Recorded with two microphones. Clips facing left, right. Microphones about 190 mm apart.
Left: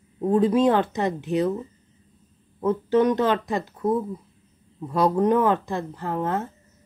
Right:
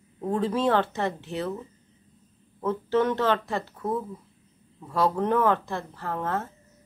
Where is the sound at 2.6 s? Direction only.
15° left (ahead or behind).